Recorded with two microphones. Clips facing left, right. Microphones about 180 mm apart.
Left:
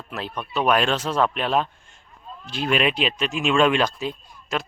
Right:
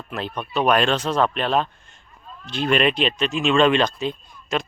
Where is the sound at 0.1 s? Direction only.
5° left (ahead or behind).